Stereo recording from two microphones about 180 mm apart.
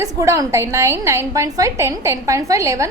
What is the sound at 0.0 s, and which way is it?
A woman's voice, 20° right (ahead or behind).